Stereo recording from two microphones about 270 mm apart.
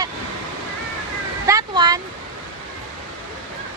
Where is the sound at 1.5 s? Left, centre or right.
Centre.